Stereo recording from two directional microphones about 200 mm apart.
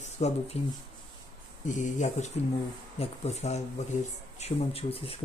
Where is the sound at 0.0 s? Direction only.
30° left (ahead or behind).